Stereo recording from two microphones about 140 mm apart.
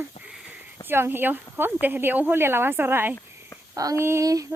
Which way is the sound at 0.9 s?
15° right (ahead or behind).